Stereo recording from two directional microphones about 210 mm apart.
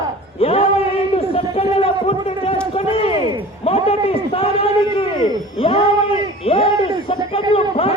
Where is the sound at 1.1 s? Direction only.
30° left (ahead or behind).